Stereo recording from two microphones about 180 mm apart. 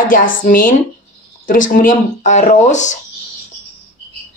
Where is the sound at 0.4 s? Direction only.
50° left (ahead or behind).